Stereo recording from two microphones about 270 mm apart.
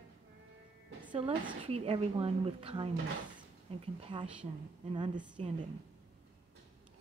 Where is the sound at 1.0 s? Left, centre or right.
Centre.